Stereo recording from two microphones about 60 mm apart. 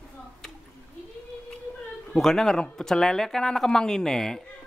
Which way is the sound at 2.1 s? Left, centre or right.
Centre.